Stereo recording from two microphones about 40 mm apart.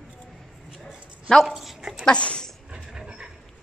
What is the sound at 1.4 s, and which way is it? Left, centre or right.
Dog, centre.